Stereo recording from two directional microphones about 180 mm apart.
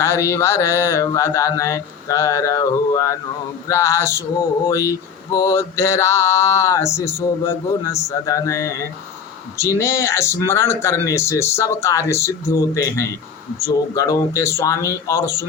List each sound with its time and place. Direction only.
0.0 s mantra: 15° left (ahead or behind)